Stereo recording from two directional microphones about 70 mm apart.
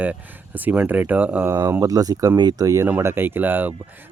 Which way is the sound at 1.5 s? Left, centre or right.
Right.